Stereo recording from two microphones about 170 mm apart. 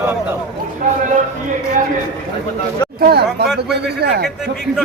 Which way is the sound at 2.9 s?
70° right (ahead or behind).